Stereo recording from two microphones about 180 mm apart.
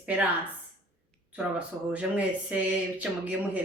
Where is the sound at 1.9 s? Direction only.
5° right (ahead or behind).